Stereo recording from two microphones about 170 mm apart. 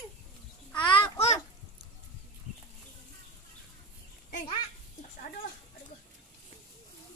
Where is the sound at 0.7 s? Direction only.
30° left (ahead or behind).